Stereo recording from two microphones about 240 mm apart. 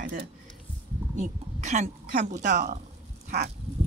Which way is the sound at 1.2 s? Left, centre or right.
Right.